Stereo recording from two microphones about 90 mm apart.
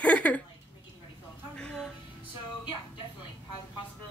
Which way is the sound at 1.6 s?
5° left (ahead or behind).